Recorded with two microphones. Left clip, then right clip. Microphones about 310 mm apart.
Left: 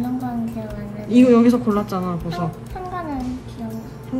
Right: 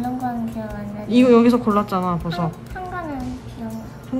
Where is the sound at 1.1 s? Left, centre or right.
Centre.